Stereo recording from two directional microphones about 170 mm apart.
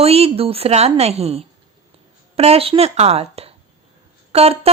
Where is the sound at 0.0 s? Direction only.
35° right (ahead or behind).